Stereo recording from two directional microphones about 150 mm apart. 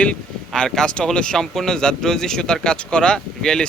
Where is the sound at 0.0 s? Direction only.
5° left (ahead or behind).